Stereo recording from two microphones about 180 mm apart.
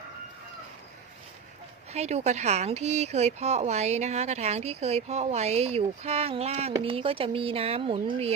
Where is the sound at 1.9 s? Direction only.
35° right (ahead or behind).